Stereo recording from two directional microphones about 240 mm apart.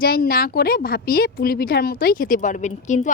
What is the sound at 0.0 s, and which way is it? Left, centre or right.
A woman's voice, left.